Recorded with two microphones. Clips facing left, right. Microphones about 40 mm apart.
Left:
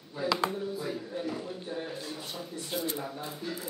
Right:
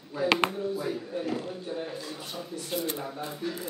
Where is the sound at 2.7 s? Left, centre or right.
Right.